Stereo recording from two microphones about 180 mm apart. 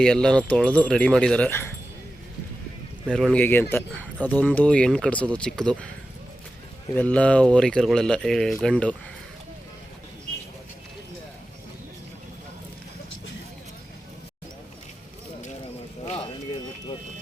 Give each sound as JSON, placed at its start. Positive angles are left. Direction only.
{"t": 0.0, "sound": "speech", "side_deg": 5}
{"t": 3.1, "sound": "speech", "side_deg": 0}
{"t": 6.9, "sound": "speech", "side_deg": 5}